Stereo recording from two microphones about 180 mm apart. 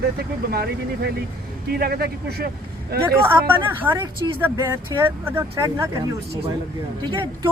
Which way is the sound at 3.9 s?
25° right (ahead or behind).